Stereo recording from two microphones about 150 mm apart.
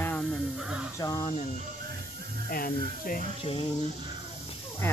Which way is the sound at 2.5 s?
75° left (ahead or behind).